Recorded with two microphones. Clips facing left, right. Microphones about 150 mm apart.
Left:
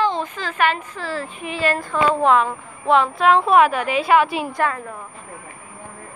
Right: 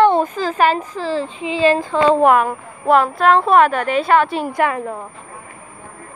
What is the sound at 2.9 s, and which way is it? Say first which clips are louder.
A woman's voice: right 2 dB; centre (ahead or behind).